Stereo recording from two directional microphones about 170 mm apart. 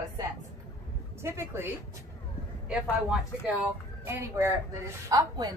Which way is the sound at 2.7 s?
5° right (ahead or behind).